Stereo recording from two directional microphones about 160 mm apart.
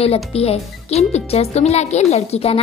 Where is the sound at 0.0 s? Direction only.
40° left (ahead or behind).